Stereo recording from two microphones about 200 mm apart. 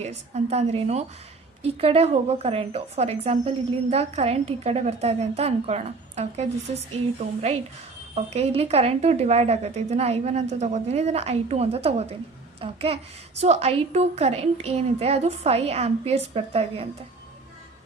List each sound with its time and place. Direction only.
0.0 s a woman's voice: 35° right (ahead or behind)
8.1 s a woman's voice: 30° right (ahead or behind)